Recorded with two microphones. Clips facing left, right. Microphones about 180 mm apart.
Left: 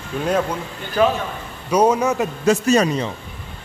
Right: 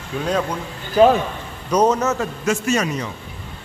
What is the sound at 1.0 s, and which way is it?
Speech, 15° right (ahead or behind).